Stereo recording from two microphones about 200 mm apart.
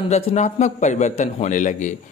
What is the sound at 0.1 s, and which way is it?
A man's voice, 35° left (ahead or behind).